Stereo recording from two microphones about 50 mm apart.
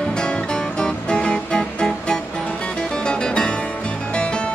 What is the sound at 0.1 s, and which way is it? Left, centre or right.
Music, centre.